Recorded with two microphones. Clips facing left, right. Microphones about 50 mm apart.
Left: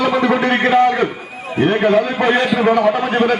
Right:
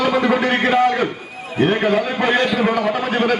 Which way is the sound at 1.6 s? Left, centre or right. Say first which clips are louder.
Left 3 dB; centre.